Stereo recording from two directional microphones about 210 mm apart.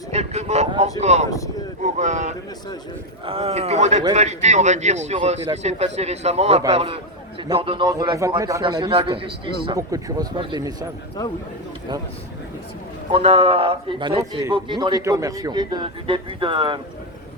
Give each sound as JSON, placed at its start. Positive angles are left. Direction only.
{"t": 0.1, "sound": "vehicle", "side_deg": -30}
{"t": 1.8, "sound": "a man's voice", "side_deg": -35}
{"t": 13.1, "sound": "speech", "side_deg": -25}